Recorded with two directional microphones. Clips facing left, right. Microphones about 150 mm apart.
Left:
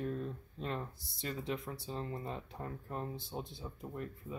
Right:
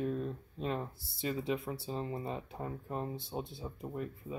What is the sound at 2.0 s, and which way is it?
Speech, 20° right (ahead or behind).